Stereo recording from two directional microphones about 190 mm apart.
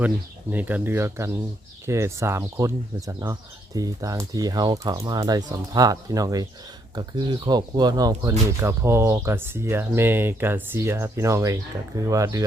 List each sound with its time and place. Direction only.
0.5 s speech: 10° right (ahead or behind)